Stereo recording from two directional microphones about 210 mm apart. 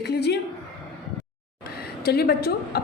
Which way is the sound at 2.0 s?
50° left (ahead or behind).